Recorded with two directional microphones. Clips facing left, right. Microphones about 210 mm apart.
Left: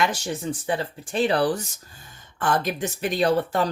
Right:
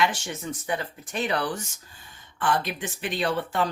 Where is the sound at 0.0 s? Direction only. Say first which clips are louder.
Left 2 dB; 35° left (ahead or behind).